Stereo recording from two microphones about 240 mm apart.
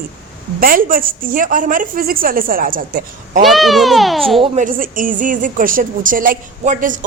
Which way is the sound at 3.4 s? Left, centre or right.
Centre.